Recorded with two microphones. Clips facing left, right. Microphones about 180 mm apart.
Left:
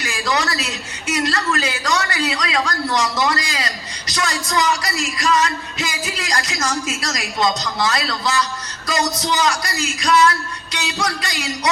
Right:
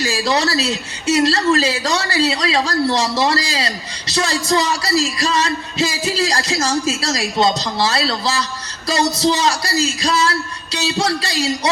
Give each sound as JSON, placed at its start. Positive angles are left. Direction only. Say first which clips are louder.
{"t": 0.0, "sound": "a man's voice", "louder": "right 4 dB", "side_deg": -30}